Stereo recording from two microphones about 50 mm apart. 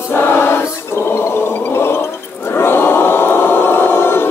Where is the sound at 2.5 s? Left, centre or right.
Left.